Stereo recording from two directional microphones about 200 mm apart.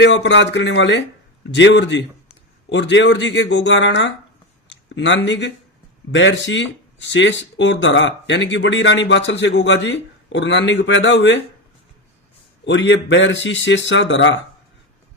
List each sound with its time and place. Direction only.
0.0 s speech: 65° left (ahead or behind)
12.6 s speech: 65° left (ahead or behind)